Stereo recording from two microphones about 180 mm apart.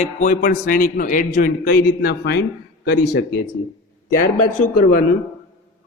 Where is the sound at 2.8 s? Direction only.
70° left (ahead or behind).